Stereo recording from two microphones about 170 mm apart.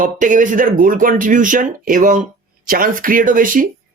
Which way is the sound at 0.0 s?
50° right (ahead or behind).